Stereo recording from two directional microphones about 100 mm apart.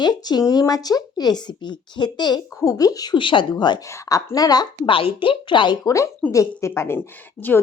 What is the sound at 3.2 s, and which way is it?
A woman's voice, 55° left (ahead or behind).